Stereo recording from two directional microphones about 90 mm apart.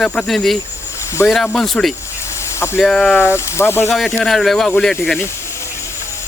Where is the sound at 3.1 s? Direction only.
25° left (ahead or behind).